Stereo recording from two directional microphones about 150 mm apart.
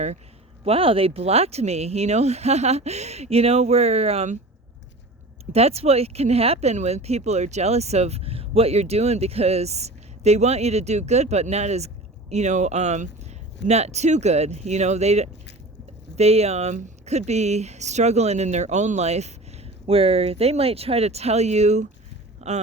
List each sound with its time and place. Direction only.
0.6 s speech: 40° right (ahead or behind)
5.5 s speech: 45° right (ahead or behind)
22.4 s a sound: 45° right (ahead or behind)